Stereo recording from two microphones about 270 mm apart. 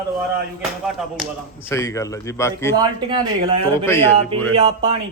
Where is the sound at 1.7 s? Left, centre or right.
Centre.